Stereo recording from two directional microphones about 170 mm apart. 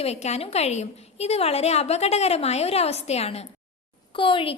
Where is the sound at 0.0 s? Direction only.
40° left (ahead or behind).